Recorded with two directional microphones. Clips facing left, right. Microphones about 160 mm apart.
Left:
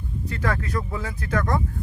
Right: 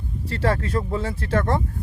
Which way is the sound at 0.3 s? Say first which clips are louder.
Right 4 dB; 30° right (ahead or behind).